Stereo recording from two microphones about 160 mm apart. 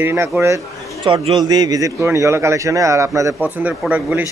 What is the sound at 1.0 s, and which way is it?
A man's voice, 30° right (ahead or behind).